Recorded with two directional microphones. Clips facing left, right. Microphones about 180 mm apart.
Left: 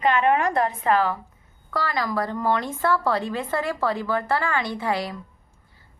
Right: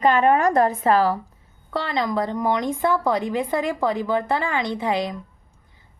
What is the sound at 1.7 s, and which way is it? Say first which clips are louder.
A woman's voice: right 2 dB; 20° right (ahead or behind).